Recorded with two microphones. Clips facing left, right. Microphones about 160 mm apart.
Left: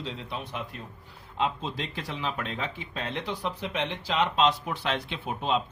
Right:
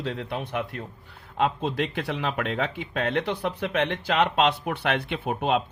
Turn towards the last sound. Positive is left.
turn(degrees=-60)  # may be behind; listen again after turning